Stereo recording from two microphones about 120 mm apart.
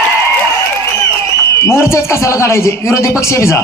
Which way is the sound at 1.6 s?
20° left (ahead or behind).